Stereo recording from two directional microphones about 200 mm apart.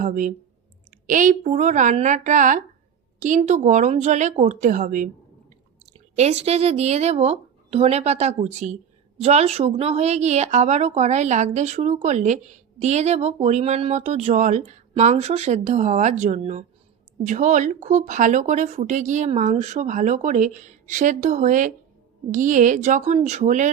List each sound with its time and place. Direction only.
0.0 s speech: 40° right (ahead or behind)
6.1 s speech: 30° right (ahead or behind)